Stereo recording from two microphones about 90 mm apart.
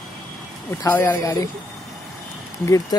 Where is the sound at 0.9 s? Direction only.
25° left (ahead or behind).